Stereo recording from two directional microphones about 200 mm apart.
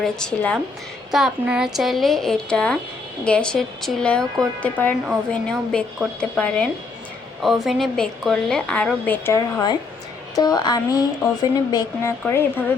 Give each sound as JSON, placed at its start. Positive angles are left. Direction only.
{"t": 0.0, "sound": "a woman's voice", "side_deg": 5}